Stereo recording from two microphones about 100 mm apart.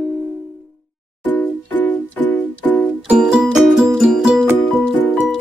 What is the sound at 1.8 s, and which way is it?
Music, 15° left (ahead or behind).